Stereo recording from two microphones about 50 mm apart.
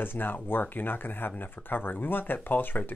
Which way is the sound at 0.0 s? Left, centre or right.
Left.